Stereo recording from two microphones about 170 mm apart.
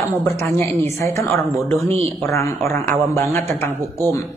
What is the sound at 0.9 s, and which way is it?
Speech, 15° left (ahead or behind).